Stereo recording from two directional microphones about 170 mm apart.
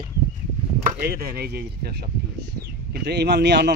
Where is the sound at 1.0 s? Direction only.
60° right (ahead or behind).